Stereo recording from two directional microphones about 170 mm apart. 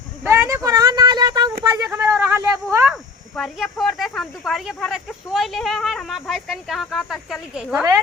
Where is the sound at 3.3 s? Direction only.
Centre (ahead or behind).